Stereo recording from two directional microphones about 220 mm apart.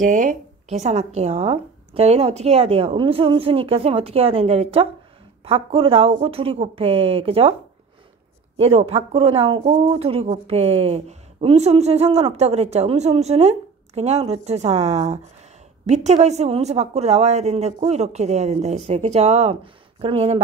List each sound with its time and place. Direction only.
0.0 s speech: 35° right (ahead or behind)
8.5 s a woman's voice: 25° right (ahead or behind)